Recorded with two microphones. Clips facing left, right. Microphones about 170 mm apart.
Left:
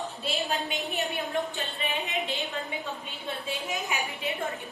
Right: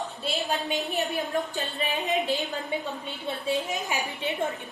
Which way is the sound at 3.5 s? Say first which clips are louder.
Right 5 dB; 35° right (ahead or behind).